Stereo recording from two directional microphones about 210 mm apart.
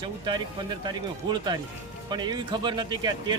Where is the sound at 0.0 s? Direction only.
20° right (ahead or behind).